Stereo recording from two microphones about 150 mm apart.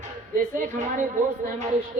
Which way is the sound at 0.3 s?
60° right (ahead or behind).